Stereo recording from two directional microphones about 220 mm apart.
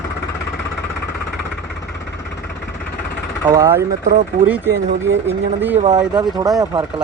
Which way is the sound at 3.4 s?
10° right (ahead or behind).